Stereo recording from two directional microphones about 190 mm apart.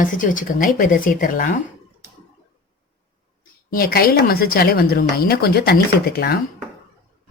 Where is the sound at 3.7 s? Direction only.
50° left (ahead or behind).